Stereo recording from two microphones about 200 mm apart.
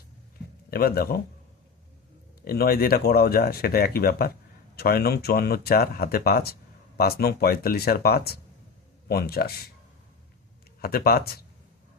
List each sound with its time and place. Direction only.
0.7 s speech: 50° left (ahead or behind)
2.4 s speech: 50° left (ahead or behind)
10.8 s speech: 50° left (ahead or behind)